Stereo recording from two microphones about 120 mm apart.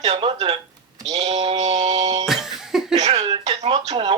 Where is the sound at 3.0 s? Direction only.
60° right (ahead or behind).